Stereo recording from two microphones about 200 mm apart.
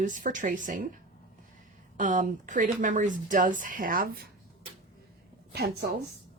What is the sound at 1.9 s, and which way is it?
Speech, 40° right (ahead or behind).